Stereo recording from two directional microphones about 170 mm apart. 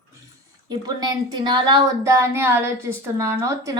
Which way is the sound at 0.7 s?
25° right (ahead or behind).